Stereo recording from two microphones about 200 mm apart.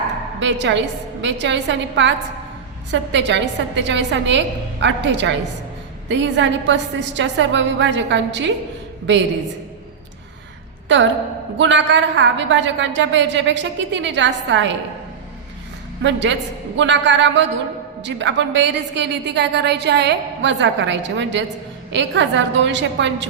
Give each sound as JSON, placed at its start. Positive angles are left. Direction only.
{"t": 0.3, "sound": "a woman's voice", "side_deg": -65}
{"t": 10.8, "sound": "a woman's voice", "side_deg": -65}
{"t": 16.0, "sound": "a woman's voice", "side_deg": -65}